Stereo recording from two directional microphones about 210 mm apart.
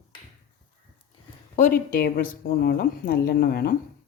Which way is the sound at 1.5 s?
40° left (ahead or behind).